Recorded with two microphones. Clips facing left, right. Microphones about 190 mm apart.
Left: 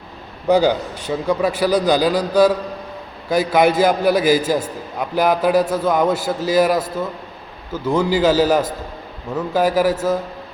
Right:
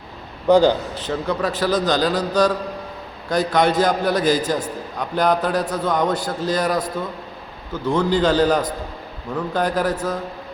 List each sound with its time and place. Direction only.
0.4 s a man's voice: 10° left (ahead or behind)